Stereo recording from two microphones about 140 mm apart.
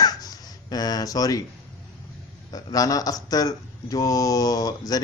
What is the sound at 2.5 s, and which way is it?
Speech, 25° left (ahead or behind).